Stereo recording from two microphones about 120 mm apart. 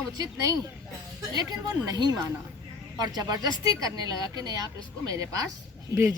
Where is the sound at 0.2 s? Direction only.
30° right (ahead or behind).